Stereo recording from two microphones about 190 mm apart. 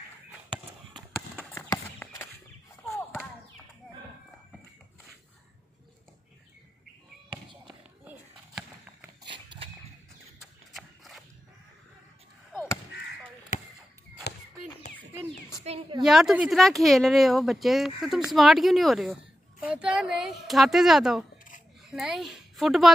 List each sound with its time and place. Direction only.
0.9 s clip-clop: 5° left (ahead or behind)
1.7 s horse: 15° left (ahead or behind)
2.8 s basketball bounce: centre (ahead or behind)
8.0 s a sound: 10° right (ahead or behind)
9.3 s dog: 25° right (ahead or behind)
10.7 s horse: centre (ahead or behind)
15.6 s a woman's voice: 30° right (ahead or behind)
16.0 s a woman's voice: centre (ahead or behind)